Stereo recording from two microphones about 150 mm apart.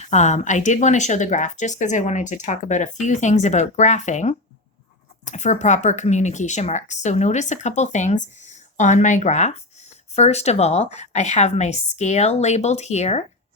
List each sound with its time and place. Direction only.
0.0 s speech: 50° left (ahead or behind)